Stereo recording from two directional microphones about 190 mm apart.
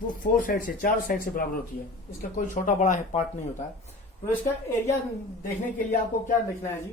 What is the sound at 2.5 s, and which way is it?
Speech, 40° left (ahead or behind).